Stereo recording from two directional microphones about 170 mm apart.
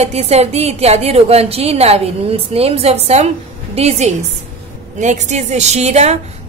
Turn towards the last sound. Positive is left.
turn(degrees=-40)  # may be behind; listen again after turning